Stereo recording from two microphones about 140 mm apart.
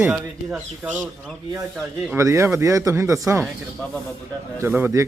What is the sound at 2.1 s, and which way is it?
Speech, 20° right (ahead or behind).